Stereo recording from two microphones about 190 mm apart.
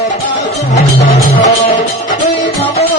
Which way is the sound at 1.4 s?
40° left (ahead or behind).